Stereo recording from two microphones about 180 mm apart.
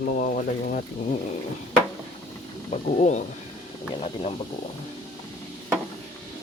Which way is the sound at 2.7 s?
40° left (ahead or behind).